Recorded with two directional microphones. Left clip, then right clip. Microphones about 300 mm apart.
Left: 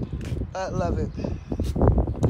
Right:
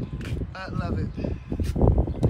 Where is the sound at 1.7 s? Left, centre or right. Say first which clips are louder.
Left 1 dB; right.